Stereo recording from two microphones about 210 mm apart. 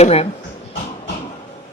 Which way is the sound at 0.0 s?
30° left (ahead or behind).